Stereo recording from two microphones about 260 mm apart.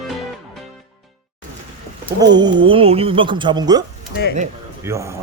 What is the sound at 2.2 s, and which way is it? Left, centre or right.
Speech, centre.